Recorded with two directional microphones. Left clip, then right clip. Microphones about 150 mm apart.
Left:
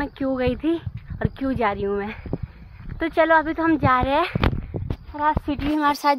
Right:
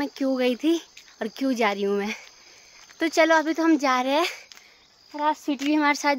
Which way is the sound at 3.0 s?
40° right (ahead or behind).